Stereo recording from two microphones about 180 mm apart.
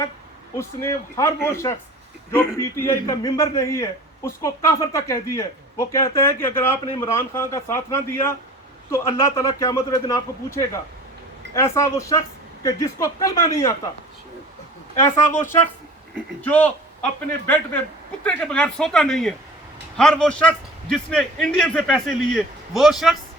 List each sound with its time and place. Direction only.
0.5 s a man's voice: 15° left (ahead or behind)
15.0 s a man's voice: 15° left (ahead or behind)